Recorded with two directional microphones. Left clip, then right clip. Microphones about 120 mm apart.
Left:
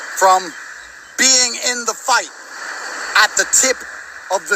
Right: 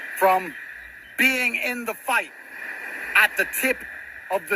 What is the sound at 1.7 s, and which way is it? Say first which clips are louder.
Speech: left 8 dB; 20° right (ahead or behind).